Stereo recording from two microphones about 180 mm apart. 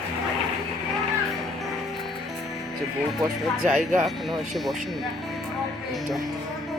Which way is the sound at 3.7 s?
45° right (ahead or behind).